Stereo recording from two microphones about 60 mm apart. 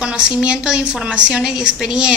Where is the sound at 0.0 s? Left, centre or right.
Centre.